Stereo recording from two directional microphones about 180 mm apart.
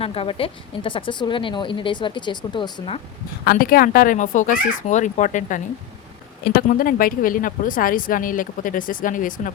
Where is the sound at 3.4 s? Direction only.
55° left (ahead or behind).